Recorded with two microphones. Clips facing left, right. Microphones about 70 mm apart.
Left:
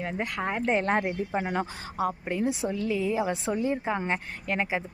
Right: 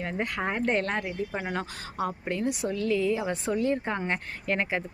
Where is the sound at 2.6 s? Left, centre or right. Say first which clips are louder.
Right 2 dB; centre.